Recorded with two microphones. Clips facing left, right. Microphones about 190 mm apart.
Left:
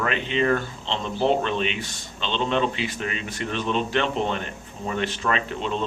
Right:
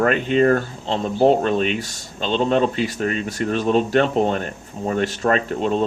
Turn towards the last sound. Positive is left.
turn(degrees=-45)  # may be behind; listen again after turning